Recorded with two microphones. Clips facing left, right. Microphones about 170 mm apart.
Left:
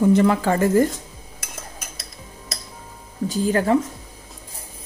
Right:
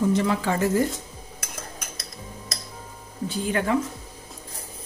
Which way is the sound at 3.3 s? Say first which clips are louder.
Left 5 dB; 35° left (ahead or behind).